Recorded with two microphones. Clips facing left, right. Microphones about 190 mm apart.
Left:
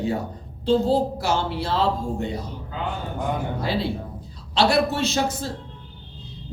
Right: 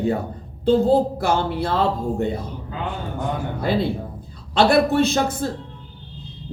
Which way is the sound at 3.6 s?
55° right (ahead or behind).